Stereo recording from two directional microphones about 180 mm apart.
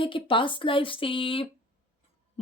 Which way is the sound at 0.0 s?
30° left (ahead or behind).